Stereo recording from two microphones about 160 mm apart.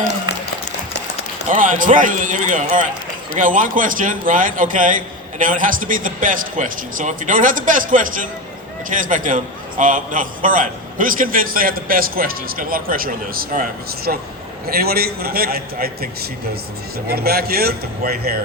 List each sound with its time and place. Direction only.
1.5 s a man's voice: 55° right (ahead or behind); by 16.0 s 70° right (ahead or behind)
17.1 s a man's voice: 75° right (ahead or behind)